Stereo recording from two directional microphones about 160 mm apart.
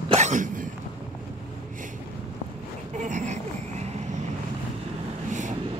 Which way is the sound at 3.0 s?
50° right (ahead or behind).